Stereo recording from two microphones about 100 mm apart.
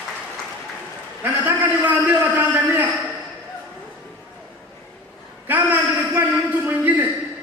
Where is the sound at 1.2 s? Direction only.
20° right (ahead or behind).